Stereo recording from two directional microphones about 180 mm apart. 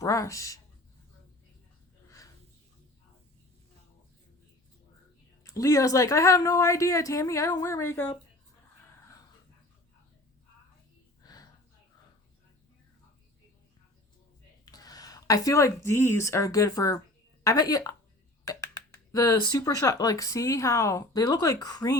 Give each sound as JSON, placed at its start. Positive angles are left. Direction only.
{"t": 0.0, "sound": "speech", "side_deg": 15}
{"t": 5.4, "sound": "a woman's voice", "side_deg": 20}
{"t": 9.0, "sound": "dog", "side_deg": 15}
{"t": 11.2, "sound": "a sound", "side_deg": 20}
{"t": 14.6, "sound": "speech", "side_deg": 20}
{"t": 18.5, "sound": "finger snapping", "side_deg": 20}
{"t": 19.1, "sound": "speech", "side_deg": 20}